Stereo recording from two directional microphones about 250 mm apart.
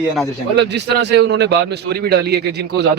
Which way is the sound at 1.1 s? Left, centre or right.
Right.